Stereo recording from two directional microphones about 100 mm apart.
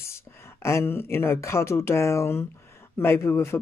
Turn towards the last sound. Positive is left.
turn(degrees=30)  # may be behind; listen again after turning